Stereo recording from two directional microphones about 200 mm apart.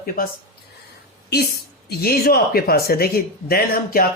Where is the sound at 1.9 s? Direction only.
50° left (ahead or behind).